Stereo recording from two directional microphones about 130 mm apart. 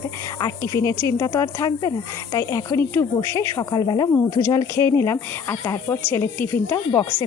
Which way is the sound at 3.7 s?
30° left (ahead or behind).